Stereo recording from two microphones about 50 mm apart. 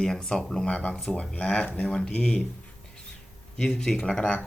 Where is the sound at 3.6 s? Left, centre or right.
Centre.